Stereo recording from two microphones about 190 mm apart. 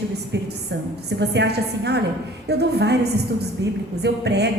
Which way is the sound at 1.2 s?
60° right (ahead or behind).